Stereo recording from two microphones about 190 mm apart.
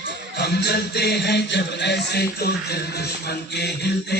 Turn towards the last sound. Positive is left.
turn(degrees=60)  # may be behind; listen again after turning